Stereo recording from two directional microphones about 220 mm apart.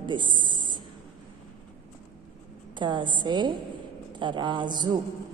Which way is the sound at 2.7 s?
20° right (ahead or behind).